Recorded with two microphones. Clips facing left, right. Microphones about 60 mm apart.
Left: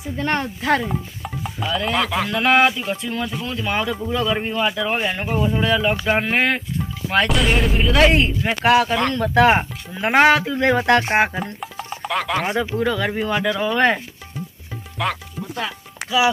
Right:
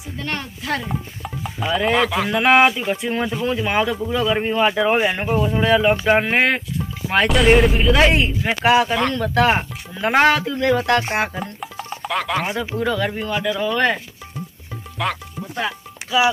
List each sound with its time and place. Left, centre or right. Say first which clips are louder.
0.2 s speech: left 6 dB; left
0.8 s stir: left 1 dB; centre
1.6 s speech: right 3 dB; centre
1.9 s speech: right 3 dB; centre
4.6 s speech: right 6 dB; right
5.3 s speech: left 1 dB; centre
5.6 s speech: right 3 dB; centre
9.3 s speech: left 5 dB; centre
10.6 s speech: right 1 dB; left
11.6 s music: even; centre
12.7 s speech: left 1 dB; centre
13.6 s speech: left 1 dB; left
15.0 s speech: even; centre
16.0 s a sound: left 1 dB; left